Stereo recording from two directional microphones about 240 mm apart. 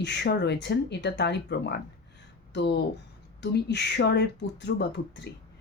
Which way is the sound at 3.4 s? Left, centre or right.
Left.